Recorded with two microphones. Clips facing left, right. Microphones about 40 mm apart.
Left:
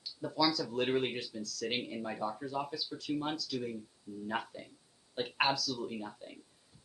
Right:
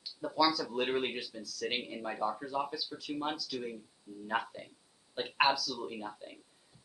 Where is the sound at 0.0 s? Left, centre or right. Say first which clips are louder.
Right 2 dB; centre.